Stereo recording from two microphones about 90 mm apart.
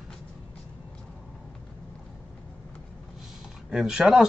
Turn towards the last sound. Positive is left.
turn(degrees=-5)  # may be behind; listen again after turning